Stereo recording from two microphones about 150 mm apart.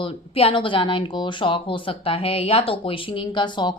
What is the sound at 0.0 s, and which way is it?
Speech, 40° left (ahead or behind).